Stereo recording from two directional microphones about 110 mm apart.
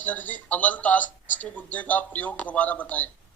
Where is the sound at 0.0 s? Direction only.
15° left (ahead or behind).